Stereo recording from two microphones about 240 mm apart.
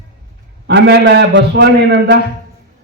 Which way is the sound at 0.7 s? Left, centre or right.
Right.